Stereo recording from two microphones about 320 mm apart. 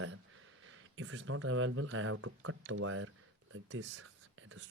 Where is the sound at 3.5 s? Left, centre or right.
Right.